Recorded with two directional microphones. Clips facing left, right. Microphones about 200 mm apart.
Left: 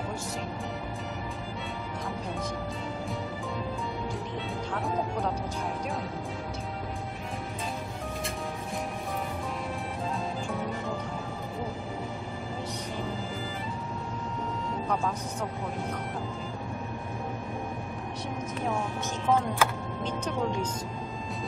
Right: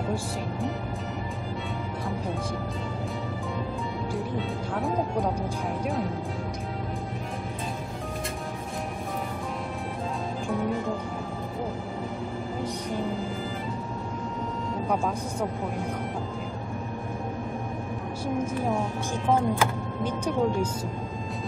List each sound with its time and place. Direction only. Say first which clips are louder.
19.3 s speech: right 2 dB; 10° right (ahead or behind)